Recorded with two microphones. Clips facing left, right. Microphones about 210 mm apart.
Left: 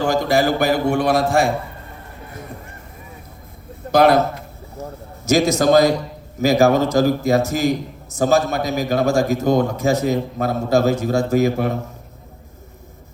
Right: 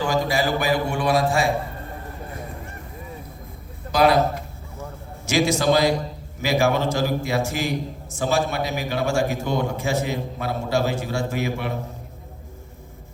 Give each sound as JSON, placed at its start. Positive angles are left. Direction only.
{"t": 0.0, "sound": "a man's voice", "side_deg": 50}
{"t": 3.9, "sound": "a man's voice", "side_deg": 45}
{"t": 4.8, "sound": "a sound", "side_deg": 40}
{"t": 6.4, "sound": "a man's voice", "side_deg": 40}